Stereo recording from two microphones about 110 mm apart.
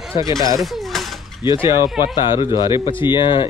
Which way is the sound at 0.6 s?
Centre (ahead or behind).